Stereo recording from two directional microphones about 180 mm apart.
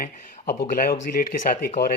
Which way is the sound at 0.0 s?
55° left (ahead or behind).